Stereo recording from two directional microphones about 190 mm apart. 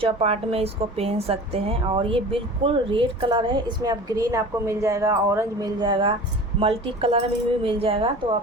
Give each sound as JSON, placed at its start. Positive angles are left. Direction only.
{"t": 0.0, "sound": "a woman's voice", "side_deg": -30}